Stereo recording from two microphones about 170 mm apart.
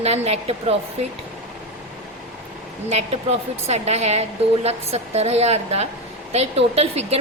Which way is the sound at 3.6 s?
40° right (ahead or behind).